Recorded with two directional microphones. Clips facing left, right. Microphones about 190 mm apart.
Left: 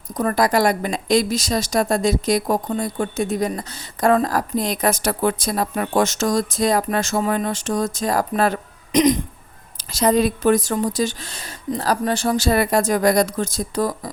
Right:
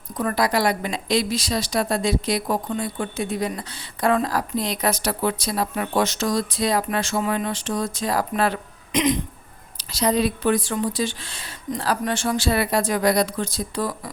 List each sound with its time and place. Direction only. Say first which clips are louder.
0.2 s a woman's voice: left 4 dB; 45° left (ahead or behind)